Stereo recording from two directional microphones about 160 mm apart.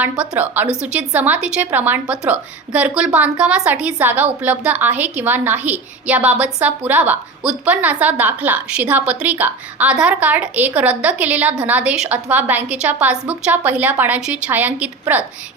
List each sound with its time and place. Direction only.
0.0 s a woman's voice: 10° right (ahead or behind)